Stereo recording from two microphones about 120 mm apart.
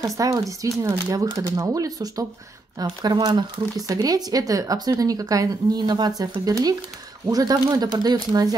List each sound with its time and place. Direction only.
0.0 s speech: 30° right (ahead or behind)